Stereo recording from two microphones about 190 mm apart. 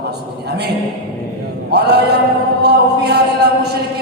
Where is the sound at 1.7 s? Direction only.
60° right (ahead or behind).